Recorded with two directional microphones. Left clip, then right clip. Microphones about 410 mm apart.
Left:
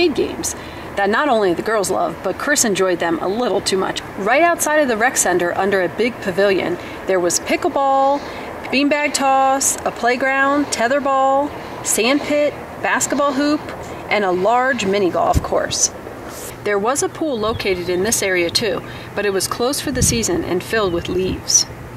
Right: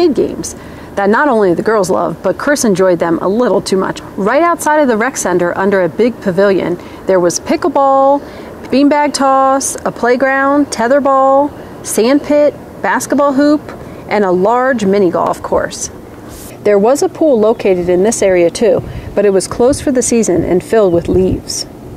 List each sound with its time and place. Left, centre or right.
0.0 s speech: right